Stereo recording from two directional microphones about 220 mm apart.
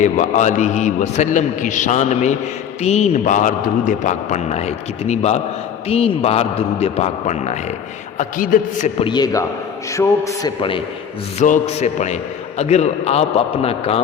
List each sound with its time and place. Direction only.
0.0 s a man's voice: 35° left (ahead or behind)
9.0 s a man's voice: 20° left (ahead or behind)
11.3 s a man's voice: 35° left (ahead or behind)